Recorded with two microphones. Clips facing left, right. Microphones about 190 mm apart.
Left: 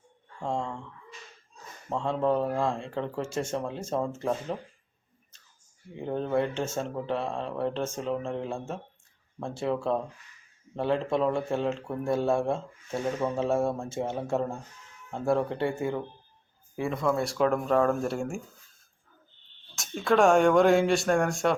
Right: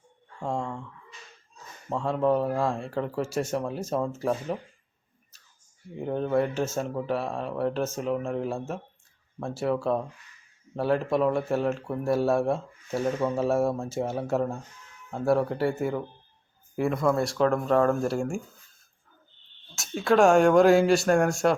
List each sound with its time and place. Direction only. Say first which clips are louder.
0.4 s speech: right 1 dB; 5° right (ahead or behind)
1.9 s speech: right 2 dB; 5° right (ahead or behind)
6.1 s speech: right 2 dB; centre (ahead or behind)
16.9 s speech: right 1 dB; 5° right (ahead or behind)
19.7 s speech: right 2 dB; 5° right (ahead or behind)